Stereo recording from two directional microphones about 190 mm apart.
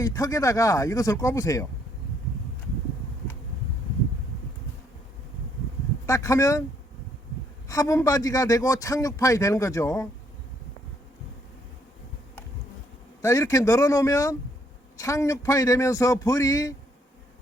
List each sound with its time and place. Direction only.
0.0 s a man's voice: 15° left (ahead or behind)
6.1 s a man's voice: 15° left (ahead or behind)
7.7 s a man's voice: 15° left (ahead or behind)
13.2 s a man's voice: 15° left (ahead or behind)